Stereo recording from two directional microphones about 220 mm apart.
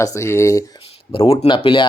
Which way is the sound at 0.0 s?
15° left (ahead or behind).